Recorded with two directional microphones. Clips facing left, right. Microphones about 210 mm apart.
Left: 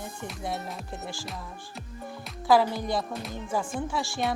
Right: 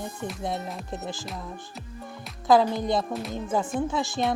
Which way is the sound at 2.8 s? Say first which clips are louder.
Right 4 dB; 20° right (ahead or behind).